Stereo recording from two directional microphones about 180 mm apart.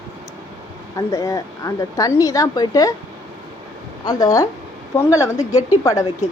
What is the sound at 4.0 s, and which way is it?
A woman's voice, 20° left (ahead or behind).